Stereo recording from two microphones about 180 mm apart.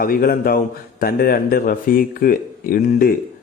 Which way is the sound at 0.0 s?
55° left (ahead or behind).